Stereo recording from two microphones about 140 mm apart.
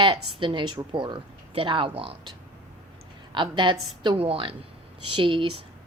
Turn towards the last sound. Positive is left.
turn(degrees=-35)  # may be behind; listen again after turning